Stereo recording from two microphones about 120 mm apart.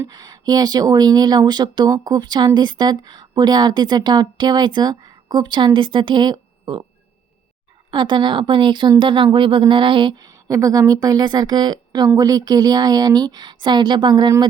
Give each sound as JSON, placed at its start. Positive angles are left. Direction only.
{"t": 0.1, "sound": "speech", "side_deg": -35}
{"t": 7.9, "sound": "speech", "side_deg": -40}